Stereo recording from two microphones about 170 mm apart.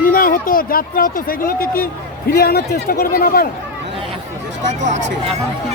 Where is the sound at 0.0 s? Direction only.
55° left (ahead or behind).